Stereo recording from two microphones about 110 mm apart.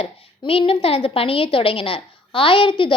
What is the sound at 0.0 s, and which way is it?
A woman's voice, 60° left (ahead or behind).